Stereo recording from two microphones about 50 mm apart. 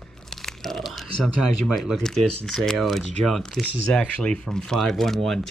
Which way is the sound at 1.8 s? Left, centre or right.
Centre.